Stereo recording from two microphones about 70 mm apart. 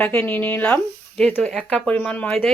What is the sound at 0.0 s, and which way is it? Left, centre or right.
Speech, left.